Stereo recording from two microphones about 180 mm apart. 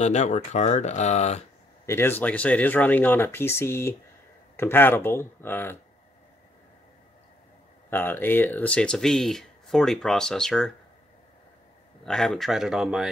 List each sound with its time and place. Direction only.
0.0 s speech: 40° left (ahead or behind)
1.9 s speech: 15° left (ahead or behind)
7.9 s speech: 10° left (ahead or behind)
12.0 s speech: 5° left (ahead or behind)